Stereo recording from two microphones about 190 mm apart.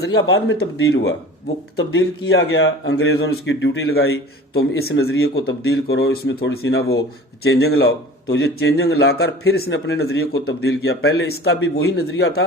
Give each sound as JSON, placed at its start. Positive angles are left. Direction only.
{"t": 0.0, "sound": "a man's voice", "side_deg": 75}
{"t": 10.4, "sound": "a man's voice", "side_deg": 60}